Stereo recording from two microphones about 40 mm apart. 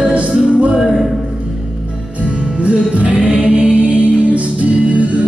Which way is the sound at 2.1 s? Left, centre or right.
Right.